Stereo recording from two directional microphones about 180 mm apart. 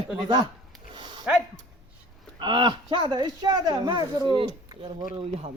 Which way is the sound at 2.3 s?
25° right (ahead or behind).